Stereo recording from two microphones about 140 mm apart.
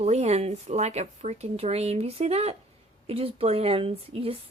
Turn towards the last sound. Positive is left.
turn(degrees=-45)  # may be behind; listen again after turning